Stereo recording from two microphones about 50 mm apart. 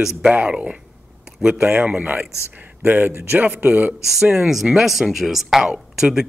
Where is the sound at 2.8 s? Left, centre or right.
Right.